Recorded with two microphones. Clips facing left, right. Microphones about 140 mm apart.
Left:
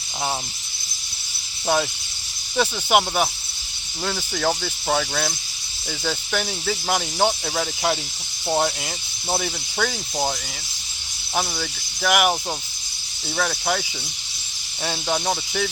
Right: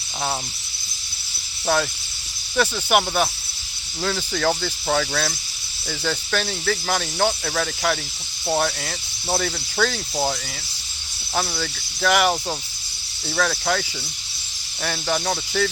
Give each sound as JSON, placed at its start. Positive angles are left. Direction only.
{"t": 1.6, "sound": "speech", "side_deg": 15}
{"t": 9.3, "sound": "speech", "side_deg": 15}
{"t": 11.3, "sound": "speech", "side_deg": 10}
{"t": 14.8, "sound": "speech", "side_deg": 15}